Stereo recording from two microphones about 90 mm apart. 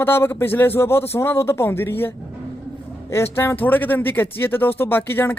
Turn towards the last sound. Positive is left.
turn(degrees=25)  # may be behind; listen again after turning